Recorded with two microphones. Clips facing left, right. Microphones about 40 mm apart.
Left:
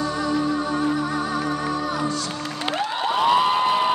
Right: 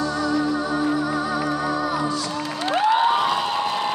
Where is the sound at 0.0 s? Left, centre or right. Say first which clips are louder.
Right 1 dB; centre.